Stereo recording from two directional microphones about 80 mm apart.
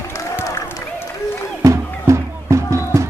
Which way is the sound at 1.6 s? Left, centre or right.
Right.